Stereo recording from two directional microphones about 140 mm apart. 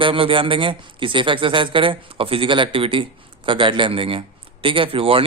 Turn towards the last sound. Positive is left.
turn(degrees=-40)  # may be behind; listen again after turning